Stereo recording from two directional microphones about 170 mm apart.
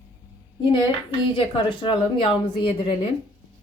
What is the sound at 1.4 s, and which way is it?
A woman's voice, 30° left (ahead or behind).